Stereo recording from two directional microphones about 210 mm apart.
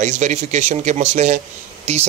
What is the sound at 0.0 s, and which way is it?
Speech, 35° right (ahead or behind).